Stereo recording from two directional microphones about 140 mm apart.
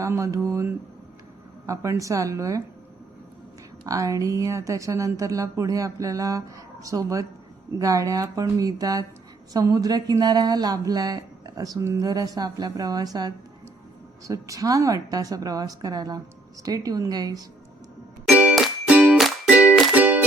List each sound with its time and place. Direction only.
0.0 s a woman's voice: 20° right (ahead or behind)
3.8 s a woman's voice: 25° right (ahead or behind)
18.3 s music: 5° right (ahead or behind)